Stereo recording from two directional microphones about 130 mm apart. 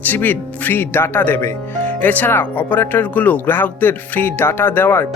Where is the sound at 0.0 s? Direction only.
15° left (ahead or behind).